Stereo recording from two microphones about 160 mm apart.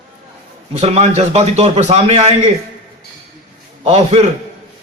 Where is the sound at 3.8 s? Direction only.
40° right (ahead or behind).